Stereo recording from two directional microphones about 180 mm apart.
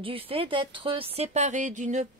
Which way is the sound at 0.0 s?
30° right (ahead or behind).